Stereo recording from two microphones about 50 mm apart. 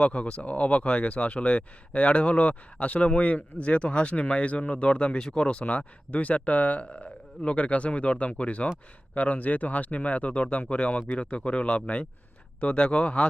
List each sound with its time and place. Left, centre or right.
0.0 s speech: left